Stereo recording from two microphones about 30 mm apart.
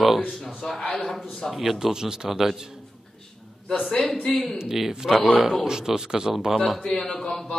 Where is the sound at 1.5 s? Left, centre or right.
Centre.